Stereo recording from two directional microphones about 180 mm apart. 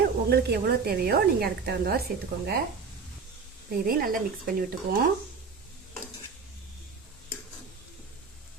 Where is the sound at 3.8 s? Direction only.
55° right (ahead or behind).